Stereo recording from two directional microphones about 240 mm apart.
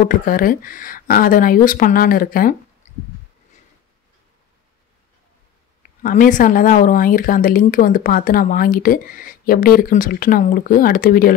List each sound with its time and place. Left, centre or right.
0.1 s speech: left
6.0 s speech: left